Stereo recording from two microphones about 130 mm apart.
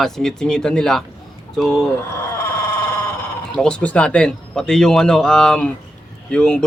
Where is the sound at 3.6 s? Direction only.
10° left (ahead or behind).